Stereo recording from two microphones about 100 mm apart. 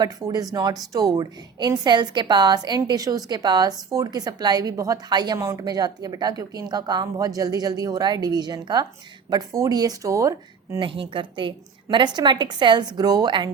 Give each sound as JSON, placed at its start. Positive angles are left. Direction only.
{"t": 0.0, "sound": "a woman's voice", "side_deg": -40}
{"t": 5.4, "sound": "speech", "side_deg": -25}
{"t": 5.6, "sound": "speech", "side_deg": -40}
{"t": 10.8, "sound": "a woman's voice", "side_deg": -60}